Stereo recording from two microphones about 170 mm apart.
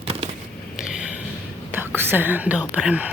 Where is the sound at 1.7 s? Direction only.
10° right (ahead or behind).